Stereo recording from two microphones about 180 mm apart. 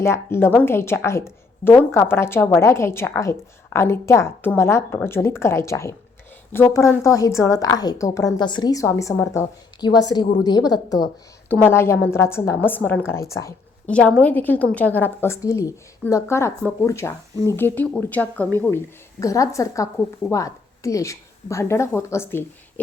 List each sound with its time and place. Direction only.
0.0 s a woman's voice: 15° left (ahead or behind)